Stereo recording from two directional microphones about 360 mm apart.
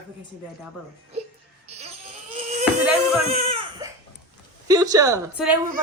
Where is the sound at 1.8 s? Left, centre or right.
Centre.